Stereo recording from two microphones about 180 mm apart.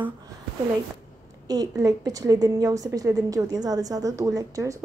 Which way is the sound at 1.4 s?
20° right (ahead or behind).